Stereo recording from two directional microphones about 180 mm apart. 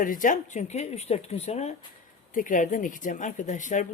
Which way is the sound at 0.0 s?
50° left (ahead or behind).